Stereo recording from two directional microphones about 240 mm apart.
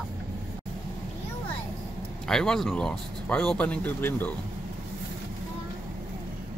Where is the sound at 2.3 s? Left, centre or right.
Centre.